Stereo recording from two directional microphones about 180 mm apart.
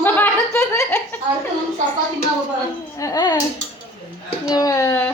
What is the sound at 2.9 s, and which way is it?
Speech, 20° left (ahead or behind).